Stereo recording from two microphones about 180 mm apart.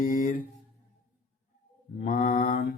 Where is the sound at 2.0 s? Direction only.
50° left (ahead or behind).